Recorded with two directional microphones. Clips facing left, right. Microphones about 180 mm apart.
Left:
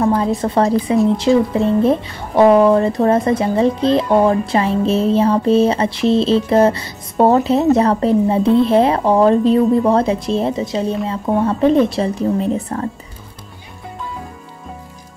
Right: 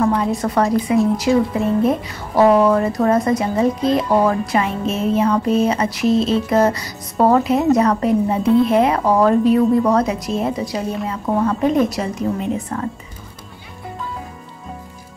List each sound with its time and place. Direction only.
0.4 s speech: 30° left (ahead or behind)